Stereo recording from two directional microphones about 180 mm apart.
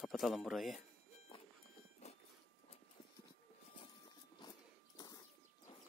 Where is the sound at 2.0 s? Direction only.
35° left (ahead or behind).